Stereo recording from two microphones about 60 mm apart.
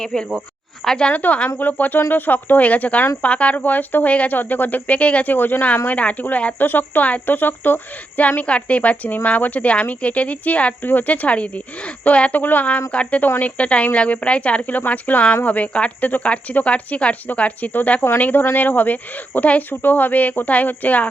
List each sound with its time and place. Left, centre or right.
0.0 s speech: centre
1.1 s speech: left